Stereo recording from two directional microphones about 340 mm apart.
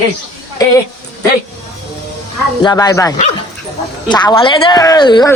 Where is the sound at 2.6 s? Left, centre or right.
Centre.